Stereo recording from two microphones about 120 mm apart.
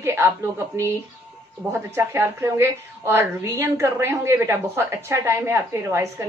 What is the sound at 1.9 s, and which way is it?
A woman's voice, 20° right (ahead or behind).